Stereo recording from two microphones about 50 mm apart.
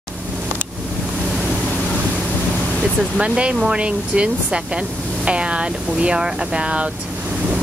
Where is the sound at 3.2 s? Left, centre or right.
Right.